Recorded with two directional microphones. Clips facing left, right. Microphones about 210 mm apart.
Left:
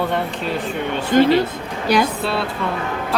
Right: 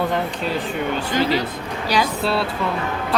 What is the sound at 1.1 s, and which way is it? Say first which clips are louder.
Speech: left 8 dB; 50° left (ahead or behind).